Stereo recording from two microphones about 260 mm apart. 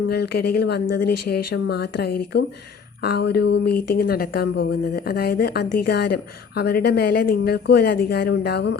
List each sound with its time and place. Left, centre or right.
0.1 s speech: left
1.0 s speech: left
1.5 s speech: left